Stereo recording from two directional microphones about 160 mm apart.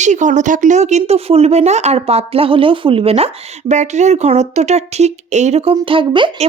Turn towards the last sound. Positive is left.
turn(degrees=-30)  # may be behind; listen again after turning